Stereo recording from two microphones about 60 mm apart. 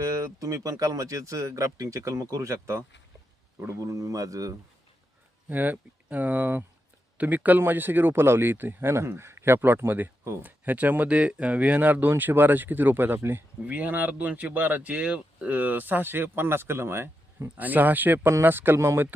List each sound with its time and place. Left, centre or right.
0.0 s speech: right
3.8 s speech: right
5.5 s speech: right
17.6 s speech: right